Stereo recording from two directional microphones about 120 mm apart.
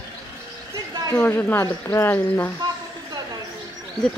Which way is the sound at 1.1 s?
15° left (ahead or behind).